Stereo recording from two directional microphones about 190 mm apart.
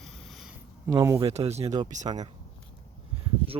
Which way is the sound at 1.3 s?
35° right (ahead or behind).